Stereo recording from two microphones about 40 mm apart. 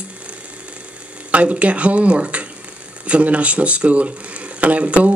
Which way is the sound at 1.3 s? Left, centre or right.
Right.